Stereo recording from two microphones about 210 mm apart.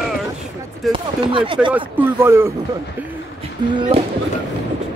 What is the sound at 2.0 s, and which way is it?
Speech, 10° right (ahead or behind).